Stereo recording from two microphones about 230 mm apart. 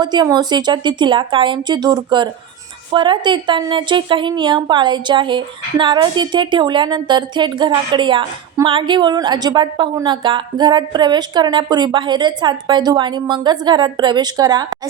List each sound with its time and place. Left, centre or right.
0.0 s a woman's voice: centre